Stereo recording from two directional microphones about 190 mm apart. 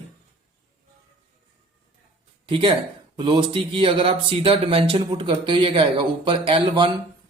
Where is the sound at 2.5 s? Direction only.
25° right (ahead or behind).